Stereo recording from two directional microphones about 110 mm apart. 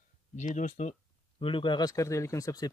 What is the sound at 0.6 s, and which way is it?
Speech, 90° left.